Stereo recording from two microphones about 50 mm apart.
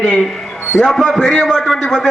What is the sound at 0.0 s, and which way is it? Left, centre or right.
A man's voice, centre.